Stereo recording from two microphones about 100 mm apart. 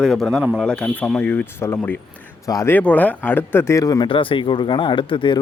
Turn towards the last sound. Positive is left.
turn(degrees=55)  # may be behind; listen again after turning